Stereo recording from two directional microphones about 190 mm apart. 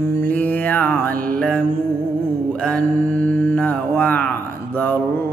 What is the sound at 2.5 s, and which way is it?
Mantra, 5° left (ahead or behind).